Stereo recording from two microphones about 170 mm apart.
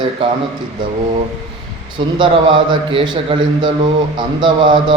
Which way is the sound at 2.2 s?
30° right (ahead or behind).